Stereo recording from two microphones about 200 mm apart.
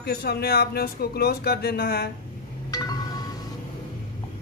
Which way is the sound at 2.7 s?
20° left (ahead or behind).